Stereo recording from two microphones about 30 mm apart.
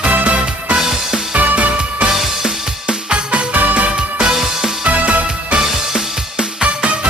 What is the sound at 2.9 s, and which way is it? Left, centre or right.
Music, right.